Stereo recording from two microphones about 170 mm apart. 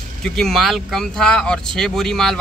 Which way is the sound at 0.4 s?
Centre (ahead or behind).